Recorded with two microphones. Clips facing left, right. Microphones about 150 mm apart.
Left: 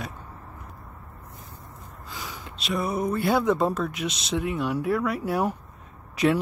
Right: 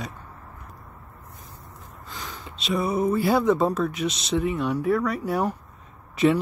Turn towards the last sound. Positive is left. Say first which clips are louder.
# right 2 dB
turn(degrees=0)  # may be behind; listen again after turning